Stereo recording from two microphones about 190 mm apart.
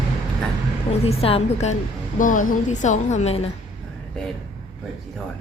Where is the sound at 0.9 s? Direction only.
30° left (ahead or behind).